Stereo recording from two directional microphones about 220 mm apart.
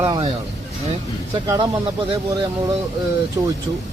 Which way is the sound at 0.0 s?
20° right (ahead or behind).